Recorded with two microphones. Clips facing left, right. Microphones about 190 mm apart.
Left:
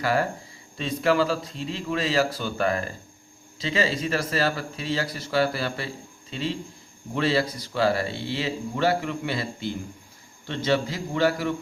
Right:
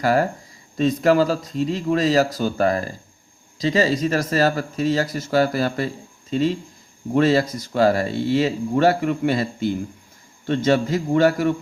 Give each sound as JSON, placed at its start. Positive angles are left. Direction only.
{"t": 0.0, "sound": "speech", "side_deg": -40}